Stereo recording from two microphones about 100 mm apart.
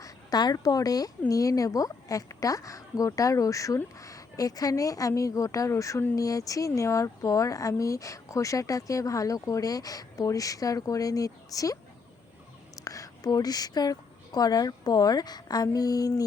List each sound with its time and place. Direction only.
0.0 s speech: 40° left (ahead or behind)
12.8 s speech: 35° left (ahead or behind)